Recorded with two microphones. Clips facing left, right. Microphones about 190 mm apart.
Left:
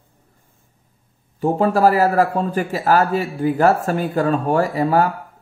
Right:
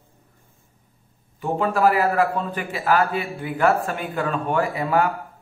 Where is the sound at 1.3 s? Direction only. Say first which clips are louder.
Left 5 dB; 40° left (ahead or behind).